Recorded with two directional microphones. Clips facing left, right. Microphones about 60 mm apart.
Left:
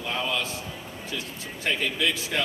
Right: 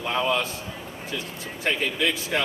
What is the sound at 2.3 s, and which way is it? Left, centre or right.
Speech, centre.